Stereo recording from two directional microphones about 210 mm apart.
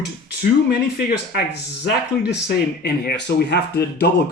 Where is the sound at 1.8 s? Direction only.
50° left (ahead or behind).